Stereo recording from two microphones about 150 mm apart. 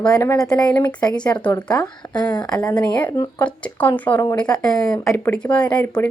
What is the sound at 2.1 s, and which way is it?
Speech, 25° left (ahead or behind).